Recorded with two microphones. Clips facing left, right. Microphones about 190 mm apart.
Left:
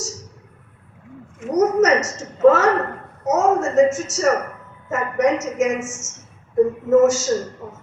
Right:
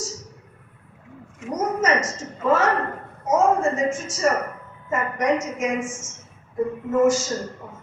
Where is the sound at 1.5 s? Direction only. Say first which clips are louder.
Left 7 dB; 75° left (ahead or behind).